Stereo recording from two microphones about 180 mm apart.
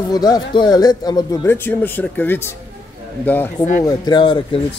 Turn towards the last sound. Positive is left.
turn(degrees=30)  # may be behind; listen again after turning